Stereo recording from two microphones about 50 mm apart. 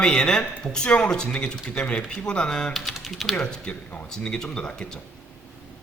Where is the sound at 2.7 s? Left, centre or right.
Centre.